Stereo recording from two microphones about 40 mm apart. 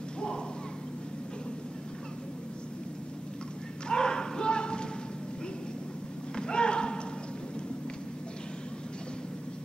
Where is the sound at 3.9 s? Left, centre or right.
Left.